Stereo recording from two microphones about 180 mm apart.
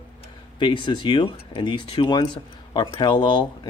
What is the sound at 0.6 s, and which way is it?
Speech, 25° left (ahead or behind).